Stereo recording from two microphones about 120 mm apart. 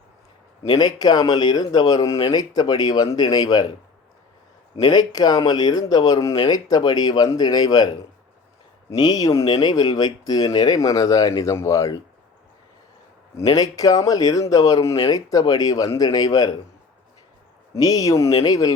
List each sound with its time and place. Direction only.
0.8 s speech: 35° left (ahead or behind)
4.8 s speech: 35° left (ahead or behind)
8.9 s speech: 35° left (ahead or behind)
13.3 s speech: 30° left (ahead or behind)
17.7 s speech: 30° left (ahead or behind)